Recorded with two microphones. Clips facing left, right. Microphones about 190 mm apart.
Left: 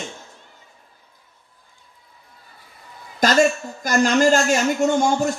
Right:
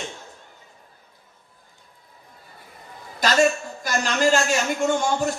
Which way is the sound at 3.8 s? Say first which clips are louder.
Left 5 dB; 45° left (ahead or behind).